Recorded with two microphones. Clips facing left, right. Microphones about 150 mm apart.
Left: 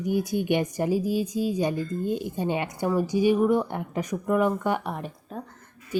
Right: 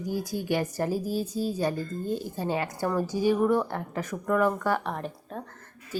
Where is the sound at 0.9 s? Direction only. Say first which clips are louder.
Left 4 dB; 40° right (ahead or behind).